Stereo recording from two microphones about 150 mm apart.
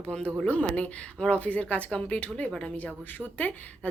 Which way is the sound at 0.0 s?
5° left (ahead or behind).